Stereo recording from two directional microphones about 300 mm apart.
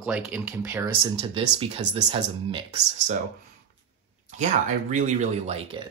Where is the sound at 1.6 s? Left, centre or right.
Centre.